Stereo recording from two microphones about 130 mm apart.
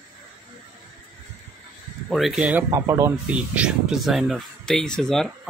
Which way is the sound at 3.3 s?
10° right (ahead or behind).